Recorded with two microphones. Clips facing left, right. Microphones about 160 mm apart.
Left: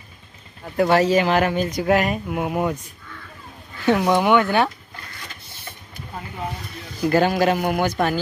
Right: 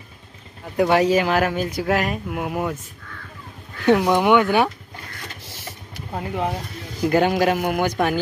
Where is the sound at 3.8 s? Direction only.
10° right (ahead or behind).